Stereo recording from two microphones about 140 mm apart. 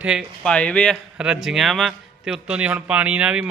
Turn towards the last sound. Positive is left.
turn(degrees=-10)  # may be behind; listen again after turning